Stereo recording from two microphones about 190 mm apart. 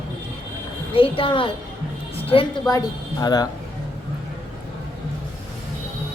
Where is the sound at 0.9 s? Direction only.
30° left (ahead or behind).